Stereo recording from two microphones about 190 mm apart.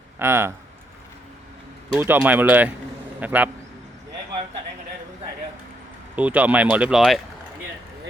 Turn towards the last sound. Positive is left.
turn(degrees=-5)  # may be behind; listen again after turning